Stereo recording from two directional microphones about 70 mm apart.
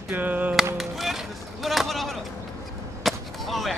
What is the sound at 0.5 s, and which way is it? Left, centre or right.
Music, centre.